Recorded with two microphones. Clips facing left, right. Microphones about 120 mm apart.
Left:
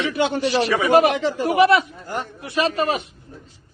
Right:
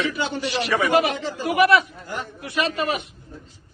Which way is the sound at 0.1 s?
60° left (ahead or behind).